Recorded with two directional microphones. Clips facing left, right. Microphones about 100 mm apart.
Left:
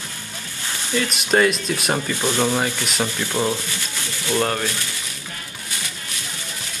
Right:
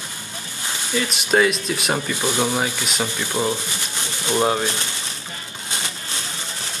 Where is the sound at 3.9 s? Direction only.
20° right (ahead or behind).